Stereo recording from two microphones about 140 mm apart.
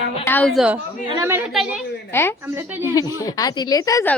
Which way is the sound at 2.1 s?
15° left (ahead or behind).